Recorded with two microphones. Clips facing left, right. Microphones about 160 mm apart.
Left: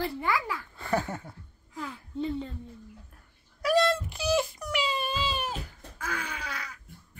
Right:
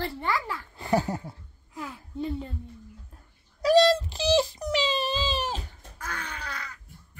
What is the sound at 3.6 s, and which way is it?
Wail, 35° right (ahead or behind).